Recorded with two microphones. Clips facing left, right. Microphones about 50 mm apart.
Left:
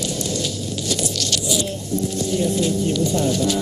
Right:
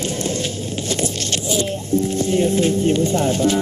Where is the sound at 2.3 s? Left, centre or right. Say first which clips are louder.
Right 3 dB; right.